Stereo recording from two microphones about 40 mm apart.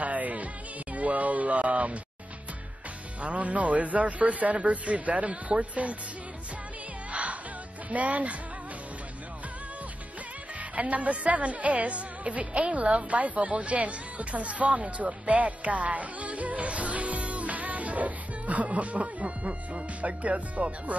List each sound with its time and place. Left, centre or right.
0.0 s music: right
0.9 s speech: right
3.2 s speech: right
7.1 s music: right
7.9 s speech: right
10.8 s speech: right